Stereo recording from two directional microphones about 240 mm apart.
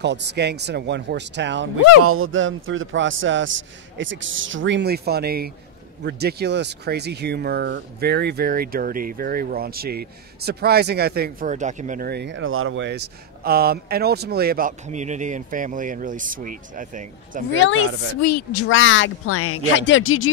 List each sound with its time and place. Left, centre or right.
0.0 s a man's voice: right
2.0 s a man's voice: right
17.6 s speech: left
18.2 s speech: left